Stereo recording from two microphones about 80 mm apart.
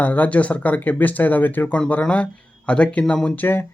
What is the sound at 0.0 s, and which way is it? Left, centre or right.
Speech, left.